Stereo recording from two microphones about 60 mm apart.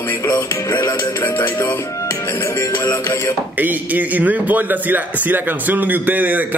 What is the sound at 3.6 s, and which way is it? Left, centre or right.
A man's voice, right.